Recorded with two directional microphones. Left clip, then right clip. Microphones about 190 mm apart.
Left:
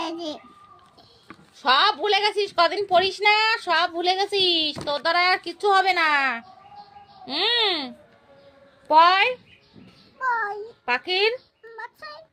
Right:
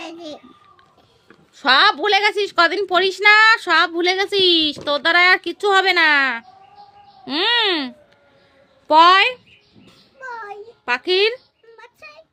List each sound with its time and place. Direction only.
0.0 s a sound: 10° right (ahead or behind)
1.5 s a woman's voice: 60° right (ahead or behind)
10.8 s speech: 55° right (ahead or behind)